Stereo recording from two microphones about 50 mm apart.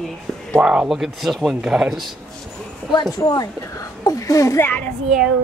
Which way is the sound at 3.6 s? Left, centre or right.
Left.